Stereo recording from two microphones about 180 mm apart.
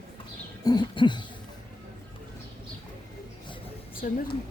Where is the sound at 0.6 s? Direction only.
25° left (ahead or behind).